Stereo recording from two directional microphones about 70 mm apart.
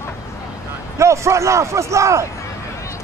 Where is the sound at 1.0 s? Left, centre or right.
Right.